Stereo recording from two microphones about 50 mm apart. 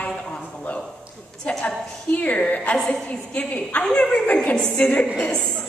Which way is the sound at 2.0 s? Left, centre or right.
Left.